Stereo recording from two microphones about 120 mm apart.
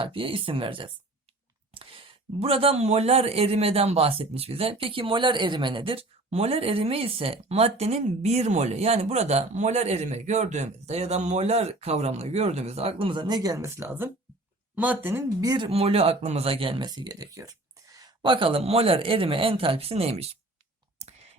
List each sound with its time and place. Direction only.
0.0 s speech: 45° right (ahead or behind)
6.3 s speech: 60° right (ahead or behind); by 15.2 s 15° right (ahead or behind)
15.4 s speech: 35° right (ahead or behind)
15.7 s speech: 55° right (ahead or behind)